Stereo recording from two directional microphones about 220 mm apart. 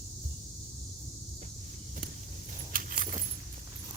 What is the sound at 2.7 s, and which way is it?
Keys jangling, 40° right (ahead or behind).